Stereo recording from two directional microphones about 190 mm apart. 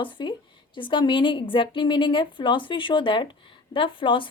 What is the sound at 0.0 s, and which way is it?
A woman's voice, 25° left (ahead or behind).